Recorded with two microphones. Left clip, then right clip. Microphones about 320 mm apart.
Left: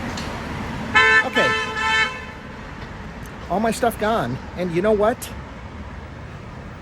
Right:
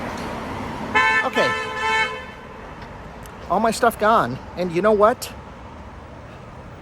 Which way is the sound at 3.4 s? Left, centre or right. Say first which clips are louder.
Right 2 dB; centre.